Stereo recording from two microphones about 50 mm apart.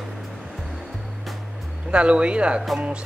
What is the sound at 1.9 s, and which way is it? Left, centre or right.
Speech, right.